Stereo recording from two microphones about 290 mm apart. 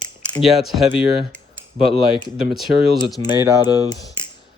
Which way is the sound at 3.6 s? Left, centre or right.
Centre.